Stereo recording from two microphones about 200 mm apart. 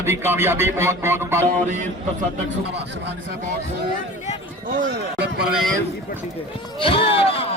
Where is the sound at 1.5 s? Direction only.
35° right (ahead or behind).